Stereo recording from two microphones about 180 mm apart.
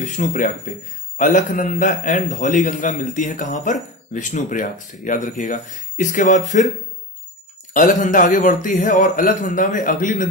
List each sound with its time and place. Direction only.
0.0 s a man's voice: 45° left (ahead or behind)
7.7 s a man's voice: 45° left (ahead or behind)